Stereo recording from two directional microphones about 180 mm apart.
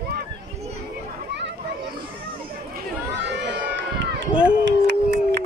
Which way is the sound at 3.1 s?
75° right (ahead or behind).